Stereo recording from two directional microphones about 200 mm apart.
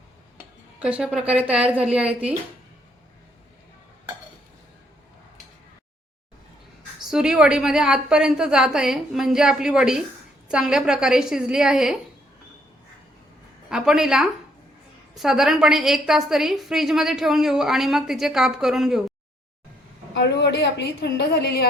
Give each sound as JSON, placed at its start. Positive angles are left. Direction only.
{"t": 0.8, "sound": "speech", "side_deg": -5}
{"t": 7.0, "sound": "a woman's voice", "side_deg": -5}
{"t": 13.7, "sound": "a woman's voice", "side_deg": -5}
{"t": 20.1, "sound": "a woman's voice", "side_deg": 60}